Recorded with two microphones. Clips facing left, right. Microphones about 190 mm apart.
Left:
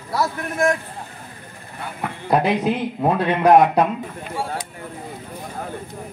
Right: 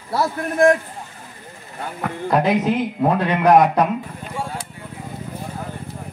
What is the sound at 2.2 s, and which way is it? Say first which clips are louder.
Speech: even; 15° left (ahead or behind).